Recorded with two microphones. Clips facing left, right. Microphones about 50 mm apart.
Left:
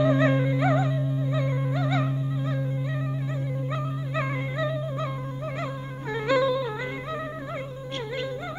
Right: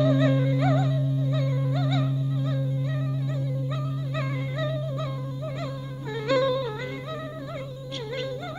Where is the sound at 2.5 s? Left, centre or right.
Left.